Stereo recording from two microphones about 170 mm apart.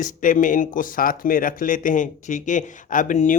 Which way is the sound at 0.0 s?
50° left (ahead or behind).